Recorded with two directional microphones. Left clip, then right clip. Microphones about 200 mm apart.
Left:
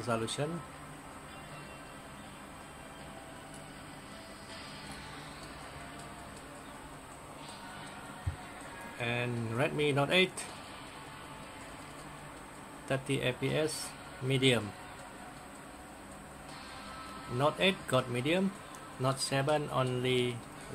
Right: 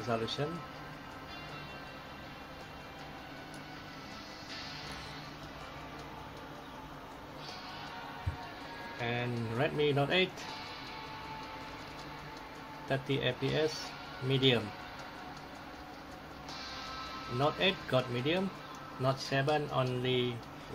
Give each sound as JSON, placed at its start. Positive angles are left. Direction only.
{"t": 0.1, "sound": "speech", "side_deg": 20}
{"t": 9.0, "sound": "speech", "side_deg": 15}
{"t": 12.8, "sound": "speech", "side_deg": 15}
{"t": 17.4, "sound": "speech", "side_deg": 15}